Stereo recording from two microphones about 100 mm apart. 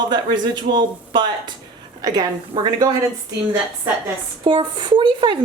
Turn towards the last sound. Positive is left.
turn(degrees=-55)  # may be behind; listen again after turning